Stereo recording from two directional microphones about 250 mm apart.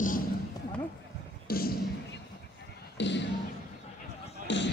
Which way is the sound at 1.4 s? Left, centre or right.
Left.